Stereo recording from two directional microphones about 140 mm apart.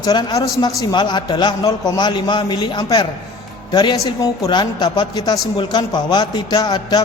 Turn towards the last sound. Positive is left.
turn(degrees=30)  # may be behind; listen again after turning